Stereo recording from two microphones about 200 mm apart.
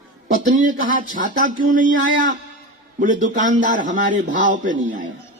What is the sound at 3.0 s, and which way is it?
Speech, 40° right (ahead or behind).